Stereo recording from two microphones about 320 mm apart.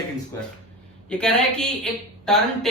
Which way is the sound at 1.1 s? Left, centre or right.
Centre.